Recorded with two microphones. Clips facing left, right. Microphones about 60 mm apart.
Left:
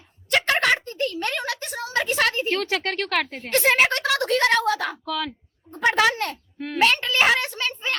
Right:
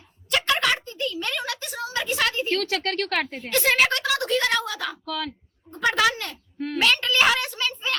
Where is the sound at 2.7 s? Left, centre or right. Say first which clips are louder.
Left 1 dB; centre.